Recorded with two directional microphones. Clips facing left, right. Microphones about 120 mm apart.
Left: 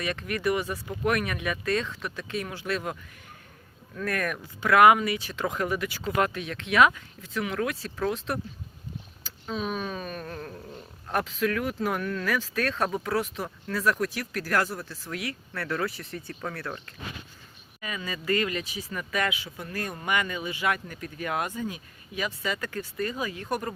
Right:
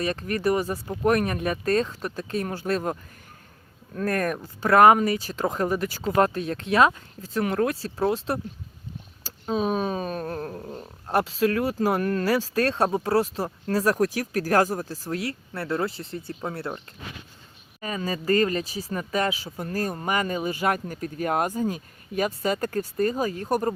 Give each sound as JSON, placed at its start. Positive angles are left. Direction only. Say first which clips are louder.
{"t": 0.0, "sound": "speech", "louder": "right 4 dB", "side_deg": -35}
{"t": 17.7, "sound": "speech", "louder": "right 6 dB", "side_deg": -35}